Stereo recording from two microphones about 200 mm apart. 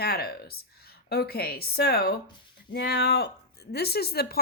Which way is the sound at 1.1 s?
50° left (ahead or behind).